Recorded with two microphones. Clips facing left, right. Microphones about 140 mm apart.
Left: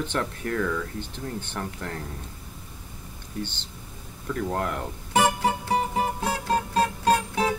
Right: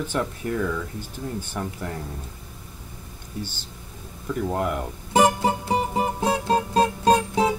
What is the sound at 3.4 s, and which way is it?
Speech, 10° right (ahead or behind).